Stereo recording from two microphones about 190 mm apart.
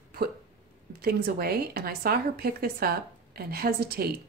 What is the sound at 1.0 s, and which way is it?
A woman's voice, 55° right (ahead or behind).